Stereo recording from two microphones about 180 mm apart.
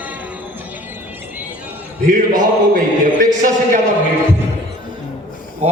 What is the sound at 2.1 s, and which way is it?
A man's voice, 45° right (ahead or behind).